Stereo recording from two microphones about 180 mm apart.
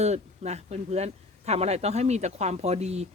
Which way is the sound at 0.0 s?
40° right (ahead or behind).